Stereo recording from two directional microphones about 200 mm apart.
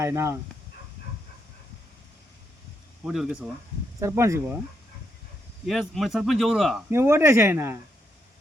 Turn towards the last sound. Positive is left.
turn(degrees=-10)  # may be behind; listen again after turning